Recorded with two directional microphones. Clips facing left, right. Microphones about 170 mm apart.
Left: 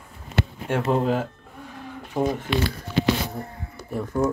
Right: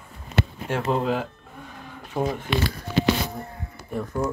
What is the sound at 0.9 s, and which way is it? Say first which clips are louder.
Speech: left 2 dB; 45° left (ahead or behind).